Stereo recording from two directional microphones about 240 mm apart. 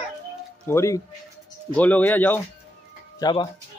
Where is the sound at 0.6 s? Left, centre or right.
Centre.